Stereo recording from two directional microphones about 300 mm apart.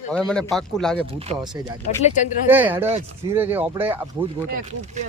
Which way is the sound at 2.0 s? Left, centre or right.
Left.